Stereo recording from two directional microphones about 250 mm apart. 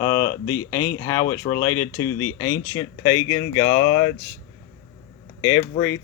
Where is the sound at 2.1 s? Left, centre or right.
Left.